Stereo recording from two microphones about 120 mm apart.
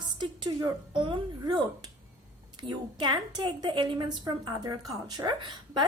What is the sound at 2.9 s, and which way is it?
A woman's voice, 40° right (ahead or behind).